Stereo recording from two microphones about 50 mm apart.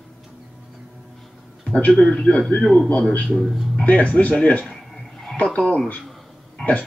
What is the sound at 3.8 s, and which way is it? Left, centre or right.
Speech, left.